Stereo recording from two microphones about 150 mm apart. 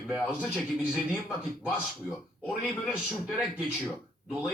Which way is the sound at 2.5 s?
5° right (ahead or behind).